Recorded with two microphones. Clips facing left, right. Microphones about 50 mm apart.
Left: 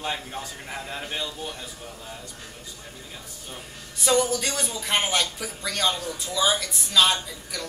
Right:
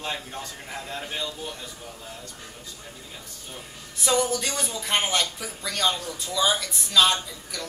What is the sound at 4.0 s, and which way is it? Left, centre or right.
Speech, centre.